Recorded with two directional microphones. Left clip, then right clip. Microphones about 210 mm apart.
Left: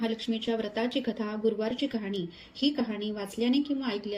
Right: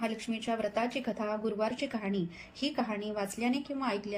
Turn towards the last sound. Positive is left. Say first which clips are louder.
# left 2 dB
turn(degrees=0)  # may be behind; listen again after turning